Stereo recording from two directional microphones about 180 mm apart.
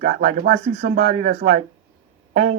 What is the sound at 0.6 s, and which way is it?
Speech, 40° right (ahead or behind).